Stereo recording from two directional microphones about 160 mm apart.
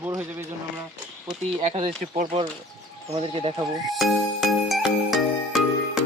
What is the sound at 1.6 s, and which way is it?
Speech, 35° right (ahead or behind).